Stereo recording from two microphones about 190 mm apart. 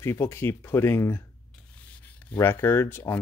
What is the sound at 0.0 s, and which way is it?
Speech, 10° left (ahead or behind).